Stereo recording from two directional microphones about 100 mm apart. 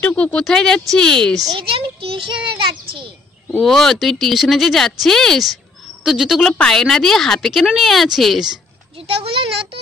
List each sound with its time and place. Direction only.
0.0 s speech: 15° left (ahead or behind)
1.6 s a child's voice: 65° right (ahead or behind)
3.5 s speech: 5° left (ahead or behind)
9.2 s speech: 70° right (ahead or behind)